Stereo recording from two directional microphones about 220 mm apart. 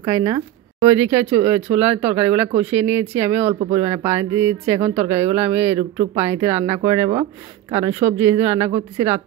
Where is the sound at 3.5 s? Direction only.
30° right (ahead or behind).